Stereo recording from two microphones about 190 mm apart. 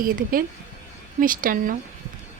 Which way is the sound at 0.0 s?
50° right (ahead or behind).